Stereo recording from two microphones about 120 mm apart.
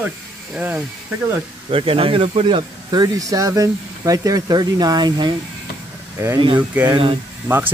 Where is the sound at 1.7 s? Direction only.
50° right (ahead or behind).